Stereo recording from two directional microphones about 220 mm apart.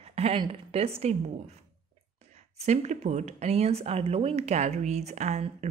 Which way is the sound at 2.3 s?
30° right (ahead or behind).